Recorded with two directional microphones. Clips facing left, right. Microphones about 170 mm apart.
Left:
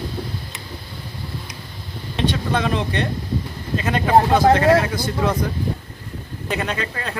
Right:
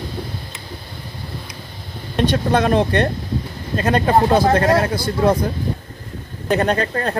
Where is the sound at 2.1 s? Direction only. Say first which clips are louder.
Right 5 dB; 50° right (ahead or behind).